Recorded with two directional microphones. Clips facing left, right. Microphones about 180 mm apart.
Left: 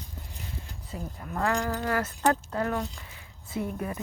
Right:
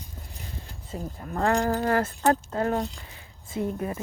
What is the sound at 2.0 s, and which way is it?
A woman's voice, 30° right (ahead or behind).